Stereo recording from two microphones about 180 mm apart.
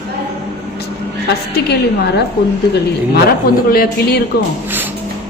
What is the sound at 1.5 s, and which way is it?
Speech, 65° left (ahead or behind).